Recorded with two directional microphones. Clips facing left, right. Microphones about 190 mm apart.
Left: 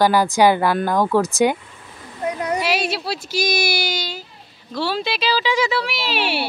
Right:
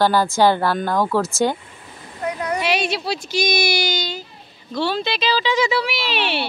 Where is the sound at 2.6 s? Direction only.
5° left (ahead or behind).